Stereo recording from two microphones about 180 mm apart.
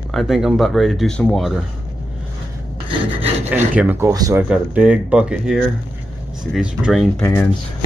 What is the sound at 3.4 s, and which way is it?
Speech, 10° right (ahead or behind).